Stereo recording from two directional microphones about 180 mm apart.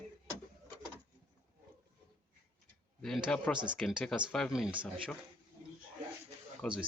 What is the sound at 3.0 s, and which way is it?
Speech, 5° left (ahead or behind).